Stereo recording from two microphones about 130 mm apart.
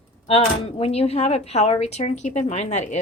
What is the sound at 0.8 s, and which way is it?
A woman's voice, 50° left (ahead or behind).